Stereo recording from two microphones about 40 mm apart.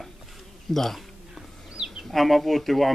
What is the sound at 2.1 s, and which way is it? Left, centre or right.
Speech, centre.